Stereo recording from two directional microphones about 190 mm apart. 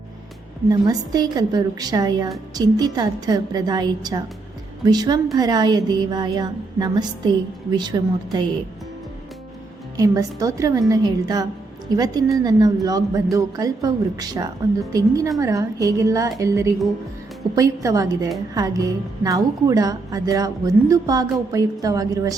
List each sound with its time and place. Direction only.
0.7 s a woman's voice: 20° right (ahead or behind)
10.0 s a woman's voice: 15° right (ahead or behind)